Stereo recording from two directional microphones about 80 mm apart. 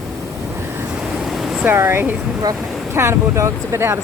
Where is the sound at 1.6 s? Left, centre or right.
Right.